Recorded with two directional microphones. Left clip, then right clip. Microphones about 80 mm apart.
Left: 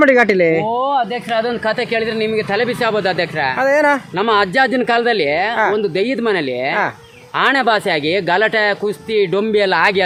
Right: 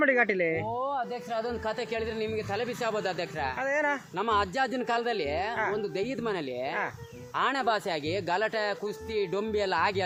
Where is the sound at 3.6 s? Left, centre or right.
Left.